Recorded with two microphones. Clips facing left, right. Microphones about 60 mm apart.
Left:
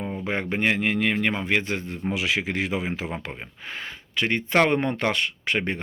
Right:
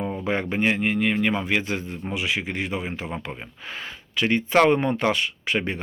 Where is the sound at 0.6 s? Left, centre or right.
Left.